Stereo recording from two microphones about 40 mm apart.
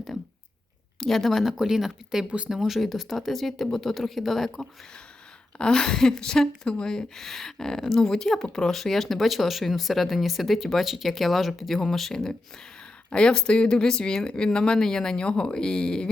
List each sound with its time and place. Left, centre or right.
0.9 s speech: centre
1.5 s speech: centre
5.5 s speech: centre
11.8 s speech: centre
13.1 s speech: left